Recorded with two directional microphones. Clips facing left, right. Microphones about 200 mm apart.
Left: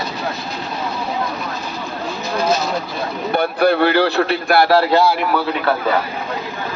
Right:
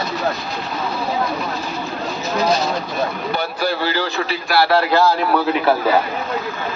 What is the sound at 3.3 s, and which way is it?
Speech, 55° left (ahead or behind).